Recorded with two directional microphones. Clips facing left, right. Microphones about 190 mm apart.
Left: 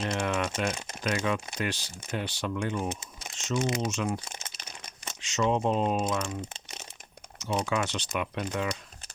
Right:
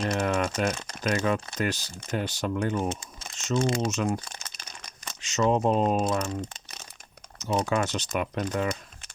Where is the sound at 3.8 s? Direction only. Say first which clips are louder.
Right 3 dB; 45° right (ahead or behind).